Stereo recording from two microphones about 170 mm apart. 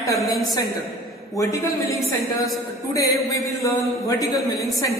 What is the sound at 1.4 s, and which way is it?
Speech, 20° left (ahead or behind).